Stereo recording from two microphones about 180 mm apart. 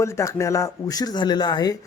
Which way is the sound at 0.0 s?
15° left (ahead or behind).